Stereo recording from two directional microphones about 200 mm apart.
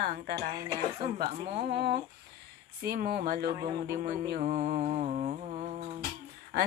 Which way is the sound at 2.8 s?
50° right (ahead or behind).